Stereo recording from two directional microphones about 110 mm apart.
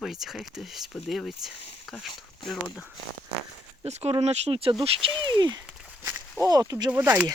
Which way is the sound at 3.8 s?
75° right (ahead or behind).